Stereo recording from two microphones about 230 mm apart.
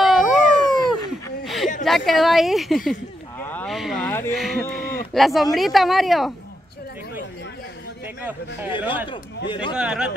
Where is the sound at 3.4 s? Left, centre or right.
Centre.